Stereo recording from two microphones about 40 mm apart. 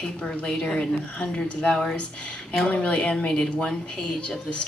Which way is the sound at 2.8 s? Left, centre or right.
Left.